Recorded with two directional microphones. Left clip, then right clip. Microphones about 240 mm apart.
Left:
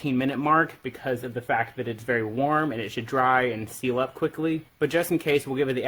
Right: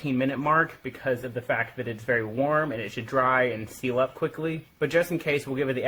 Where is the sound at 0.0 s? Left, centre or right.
Left.